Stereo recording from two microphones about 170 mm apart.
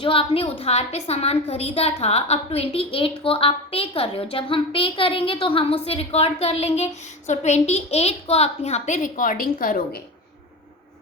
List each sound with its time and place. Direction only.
0.0 s a woman's voice: 30° left (ahead or behind); by 10.0 s 55° left (ahead or behind)